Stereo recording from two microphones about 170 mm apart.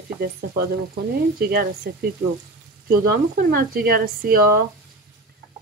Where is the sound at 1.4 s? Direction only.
65° right (ahead or behind).